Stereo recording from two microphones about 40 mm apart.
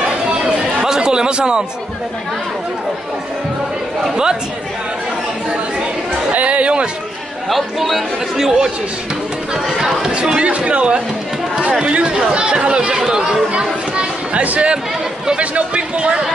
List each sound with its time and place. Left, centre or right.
0.8 s chatter: centre
6.3 s speech: right
7.4 s speech: centre
9.7 s speech: centre
10.1 s speech: right